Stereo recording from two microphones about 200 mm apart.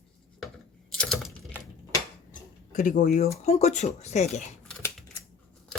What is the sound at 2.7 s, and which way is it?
Speech, 40° left (ahead or behind).